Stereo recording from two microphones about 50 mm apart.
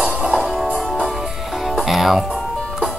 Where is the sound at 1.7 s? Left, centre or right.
Centre.